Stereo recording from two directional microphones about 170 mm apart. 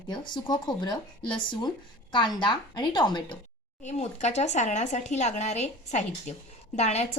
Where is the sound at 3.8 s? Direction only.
40° left (ahead or behind).